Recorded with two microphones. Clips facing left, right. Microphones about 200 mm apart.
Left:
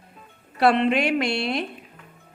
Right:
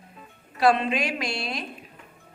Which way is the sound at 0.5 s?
60° left (ahead or behind).